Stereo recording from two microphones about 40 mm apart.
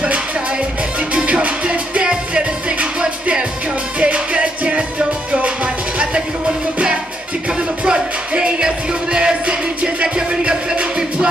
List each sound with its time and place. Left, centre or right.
1.1 s music: right